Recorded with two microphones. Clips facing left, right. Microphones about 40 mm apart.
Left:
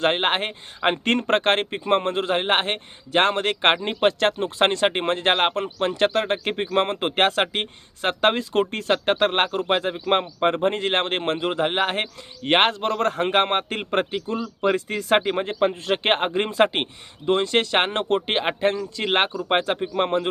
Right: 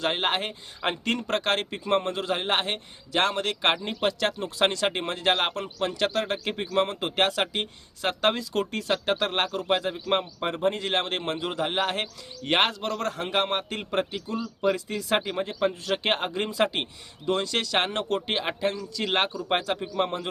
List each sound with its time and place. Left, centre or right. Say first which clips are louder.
0.0 s speech: left 5 dB; left